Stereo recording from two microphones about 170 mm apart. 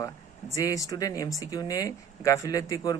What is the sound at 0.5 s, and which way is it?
Speech, 20° left (ahead or behind).